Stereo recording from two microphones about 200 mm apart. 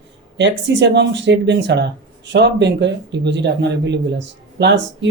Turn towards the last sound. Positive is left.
turn(degrees=-65)  # may be behind; listen again after turning